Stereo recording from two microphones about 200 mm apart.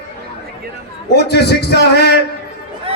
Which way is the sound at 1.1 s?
55° left (ahead or behind).